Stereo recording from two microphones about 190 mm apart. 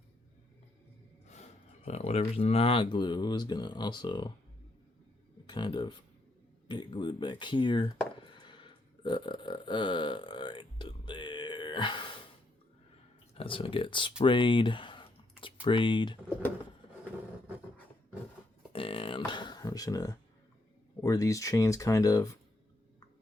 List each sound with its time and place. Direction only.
1.3 s speech: 35° left (ahead or behind)
5.5 s speech: 25° left (ahead or behind)
8.4 s burping: 25° left (ahead or behind)
13.3 s speech: 30° left (ahead or behind)
14.2 s typing: 25° left (ahead or behind)
15.6 s speech: 25° left (ahead or behind)
18.7 s beatboxing: 30° left (ahead or behind)
21.0 s speech: 15° left (ahead or behind)